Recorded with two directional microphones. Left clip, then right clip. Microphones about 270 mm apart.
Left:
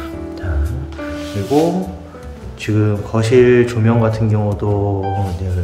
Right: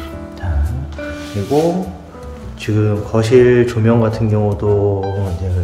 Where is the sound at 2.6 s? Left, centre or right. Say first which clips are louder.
Even; centre.